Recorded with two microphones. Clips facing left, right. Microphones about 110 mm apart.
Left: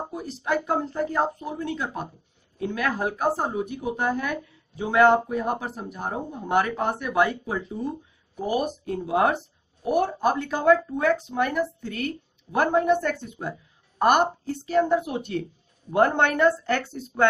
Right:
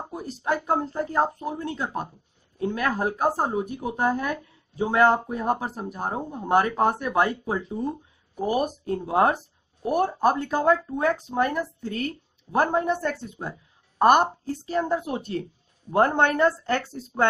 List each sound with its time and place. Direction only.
0.1 s speech: 40° right (ahead or behind)
8.6 s speech: 35° right (ahead or behind)